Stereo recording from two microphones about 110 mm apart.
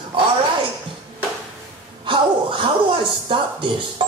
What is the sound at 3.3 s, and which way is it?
Speech, 50° right (ahead or behind).